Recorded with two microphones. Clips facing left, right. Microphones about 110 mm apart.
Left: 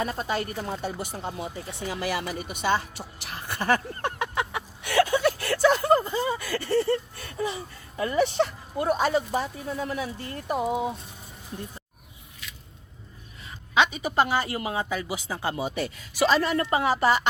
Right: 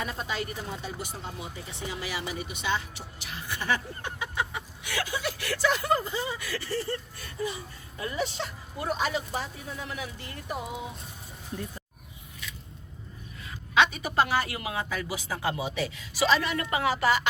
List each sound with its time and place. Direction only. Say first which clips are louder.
0.0 s speech: left 5 dB; 45° left (ahead or behind); by 6.9 s 65° left (ahead or behind)
7.9 s speech: left 9 dB; 65° left (ahead or behind); by 10.3 s 35° left (ahead or behind)
10.5 s speech: left 9 dB; 45° left (ahead or behind)
13.4 s a woman's voice: left 1 dB; 20° left (ahead or behind)
14.8 s speech: left 2 dB; 20° left (ahead or behind)